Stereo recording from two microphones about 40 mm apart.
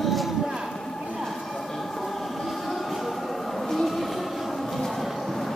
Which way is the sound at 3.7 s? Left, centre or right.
Centre.